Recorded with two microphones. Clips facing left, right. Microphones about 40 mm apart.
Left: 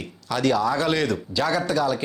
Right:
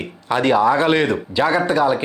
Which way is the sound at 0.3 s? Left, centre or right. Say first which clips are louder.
Right 6 dB; right.